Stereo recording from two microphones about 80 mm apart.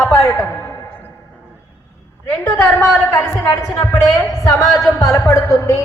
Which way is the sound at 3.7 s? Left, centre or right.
Left.